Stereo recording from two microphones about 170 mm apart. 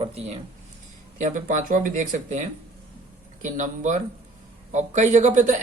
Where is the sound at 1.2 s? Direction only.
50° right (ahead or behind).